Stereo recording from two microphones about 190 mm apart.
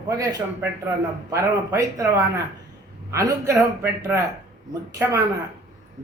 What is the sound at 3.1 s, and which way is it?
A man's voice, 15° right (ahead or behind).